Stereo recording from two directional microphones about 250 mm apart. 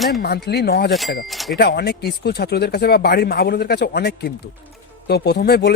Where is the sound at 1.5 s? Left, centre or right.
Left.